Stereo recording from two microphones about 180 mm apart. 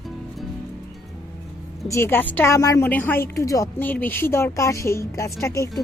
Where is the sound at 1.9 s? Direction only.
10° left (ahead or behind).